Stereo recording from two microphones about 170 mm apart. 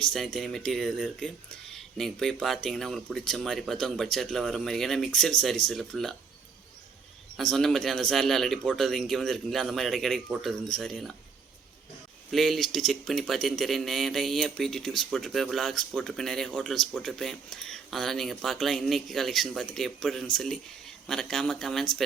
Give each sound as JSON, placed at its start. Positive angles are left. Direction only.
{"t": 0.0, "sound": "speech", "side_deg": 0}
{"t": 7.3, "sound": "speech", "side_deg": 0}
{"t": 12.3, "sound": "speech", "side_deg": 0}